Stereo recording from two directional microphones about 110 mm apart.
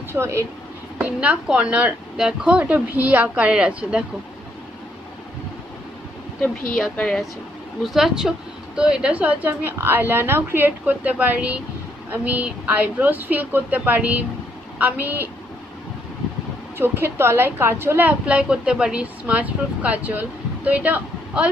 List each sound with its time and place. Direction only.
0.1 s speech: 25° right (ahead or behind)
0.9 s a woman's voice: 10° right (ahead or behind)
6.4 s a woman's voice: 10° left (ahead or behind); by 15.2 s 15° right (ahead or behind)
16.7 s a woman's voice: 20° right (ahead or behind)